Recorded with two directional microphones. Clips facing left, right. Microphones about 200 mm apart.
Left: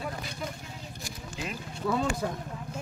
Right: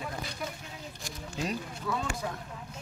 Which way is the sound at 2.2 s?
50° left (ahead or behind).